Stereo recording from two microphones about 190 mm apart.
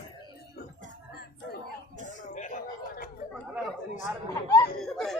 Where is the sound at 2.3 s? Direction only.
40° left (ahead or behind).